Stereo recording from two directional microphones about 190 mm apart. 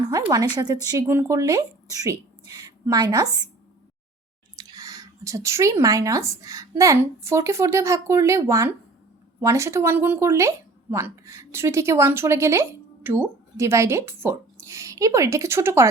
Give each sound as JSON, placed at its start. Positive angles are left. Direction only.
{"t": 0.0, "sound": "a sound", "side_deg": -20}
{"t": 0.5, "sound": "speech", "side_deg": -20}
{"t": 4.5, "sound": "a woman's voice", "side_deg": -20}